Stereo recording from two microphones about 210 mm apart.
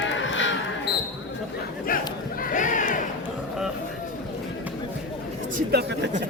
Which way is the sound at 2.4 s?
40° left (ahead or behind).